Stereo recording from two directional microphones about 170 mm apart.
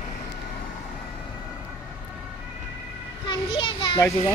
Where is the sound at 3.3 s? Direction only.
30° left (ahead or behind).